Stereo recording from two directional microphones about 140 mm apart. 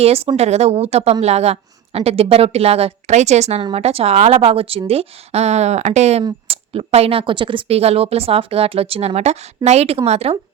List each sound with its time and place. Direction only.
0.0 s speech: 45° right (ahead or behind)